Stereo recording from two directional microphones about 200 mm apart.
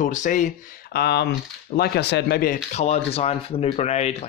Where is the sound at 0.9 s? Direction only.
55° left (ahead or behind).